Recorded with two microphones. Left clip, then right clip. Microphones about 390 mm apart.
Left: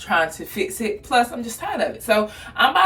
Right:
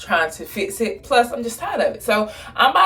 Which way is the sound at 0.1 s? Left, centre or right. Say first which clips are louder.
Right 1 dB; centre.